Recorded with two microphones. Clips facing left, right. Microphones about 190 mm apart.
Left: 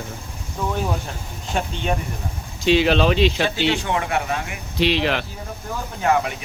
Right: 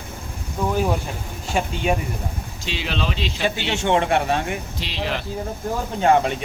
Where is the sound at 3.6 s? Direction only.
25° right (ahead or behind).